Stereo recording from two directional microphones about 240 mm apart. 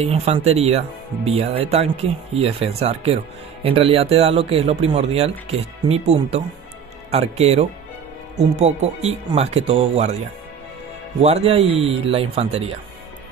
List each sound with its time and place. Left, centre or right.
0.0 s speech: right
11.1 s speech: right